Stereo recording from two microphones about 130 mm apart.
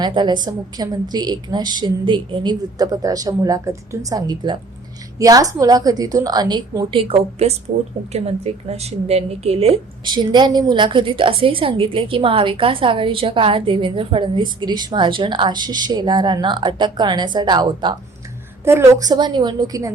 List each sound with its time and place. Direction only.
0.0 s a woman's voice: 35° right (ahead or behind)
7.0 s a woman's voice: 50° right (ahead or behind)
10.0 s a woman's voice: 35° right (ahead or behind)
18.6 s a woman's voice: 20° right (ahead or behind)